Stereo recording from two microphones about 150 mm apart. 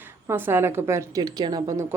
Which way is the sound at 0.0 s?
15° right (ahead or behind).